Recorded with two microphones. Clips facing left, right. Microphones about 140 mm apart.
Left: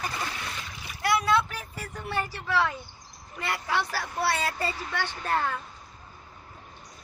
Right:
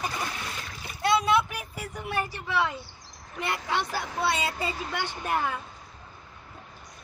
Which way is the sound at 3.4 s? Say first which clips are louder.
Even; 20° right (ahead or behind).